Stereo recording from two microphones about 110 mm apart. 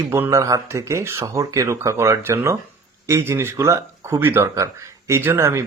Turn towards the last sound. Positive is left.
turn(degrees=-25)  # may be behind; listen again after turning